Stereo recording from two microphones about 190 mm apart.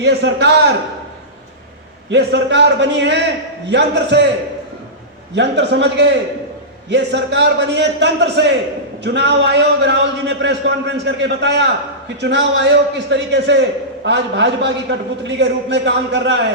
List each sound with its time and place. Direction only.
0.0 s a man's voice: 65° right (ahead or behind)
2.0 s a man's voice: 65° right (ahead or behind)
5.3 s a man's voice: 65° right (ahead or behind)